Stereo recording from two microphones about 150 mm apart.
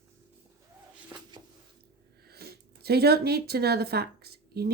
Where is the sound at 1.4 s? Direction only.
30° right (ahead or behind).